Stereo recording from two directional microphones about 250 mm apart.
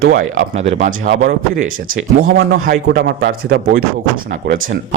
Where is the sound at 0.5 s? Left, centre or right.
Right.